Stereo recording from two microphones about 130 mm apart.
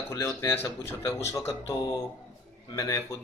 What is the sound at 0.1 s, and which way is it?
Speech, 25° left (ahead or behind).